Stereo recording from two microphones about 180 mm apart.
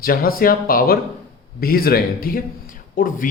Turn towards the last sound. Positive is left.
turn(degrees=50)  # may be behind; listen again after turning